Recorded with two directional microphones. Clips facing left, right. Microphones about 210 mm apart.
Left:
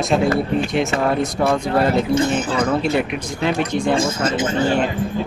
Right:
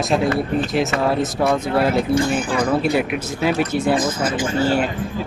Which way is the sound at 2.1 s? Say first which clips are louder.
Even; 20° left (ahead or behind).